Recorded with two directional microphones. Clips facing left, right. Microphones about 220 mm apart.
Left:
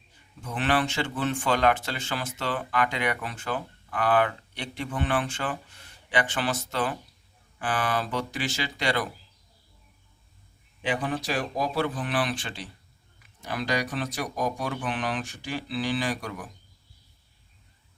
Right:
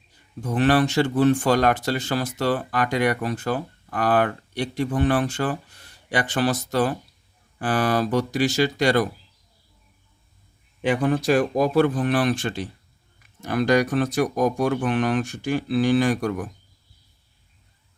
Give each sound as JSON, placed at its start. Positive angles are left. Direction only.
{"t": 0.4, "sound": "speech", "side_deg": -40}
{"t": 10.8, "sound": "speech", "side_deg": -45}